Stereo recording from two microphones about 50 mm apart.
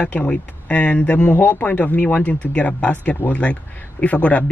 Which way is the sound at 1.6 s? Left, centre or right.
Left.